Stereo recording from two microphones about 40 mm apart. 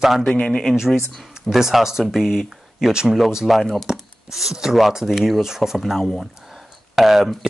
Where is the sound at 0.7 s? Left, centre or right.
Centre.